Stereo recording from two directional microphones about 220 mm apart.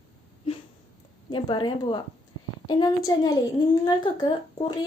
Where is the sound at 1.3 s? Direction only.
20° left (ahead or behind).